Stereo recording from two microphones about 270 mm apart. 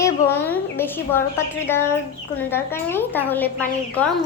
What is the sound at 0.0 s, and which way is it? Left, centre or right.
A woman's voice, centre.